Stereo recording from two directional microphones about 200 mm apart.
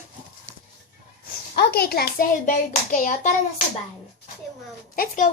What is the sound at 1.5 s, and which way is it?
Speech, 50° left (ahead or behind).